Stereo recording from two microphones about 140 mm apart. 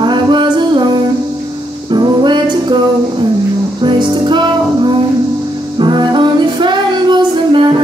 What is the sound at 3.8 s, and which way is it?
Music, 35° right (ahead or behind).